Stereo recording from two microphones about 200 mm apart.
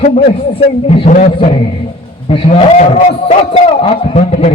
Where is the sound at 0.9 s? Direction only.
35° left (ahead or behind).